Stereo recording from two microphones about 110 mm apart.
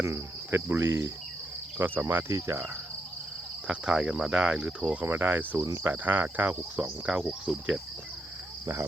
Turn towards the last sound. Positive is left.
turn(degrees=-5)  # may be behind; listen again after turning